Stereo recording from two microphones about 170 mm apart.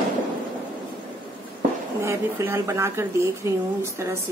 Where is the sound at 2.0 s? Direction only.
15° right (ahead or behind).